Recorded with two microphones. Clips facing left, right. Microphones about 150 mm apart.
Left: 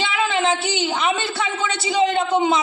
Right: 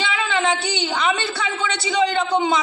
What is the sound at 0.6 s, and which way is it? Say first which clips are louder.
A woman's voice: left 1 dB; 25° left (ahead or behind).